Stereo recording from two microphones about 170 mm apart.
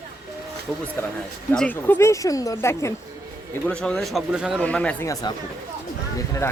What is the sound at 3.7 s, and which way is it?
Speech, 5° left (ahead or behind).